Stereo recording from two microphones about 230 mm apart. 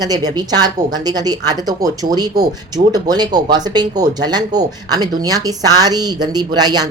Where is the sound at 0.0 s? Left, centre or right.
Centre.